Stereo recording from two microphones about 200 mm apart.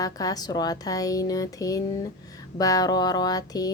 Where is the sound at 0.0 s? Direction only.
20° left (ahead or behind).